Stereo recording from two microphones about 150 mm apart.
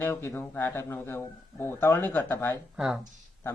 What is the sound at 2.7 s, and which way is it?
Speech, centre (ahead or behind).